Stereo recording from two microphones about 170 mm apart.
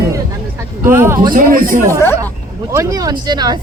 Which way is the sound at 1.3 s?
55° right (ahead or behind).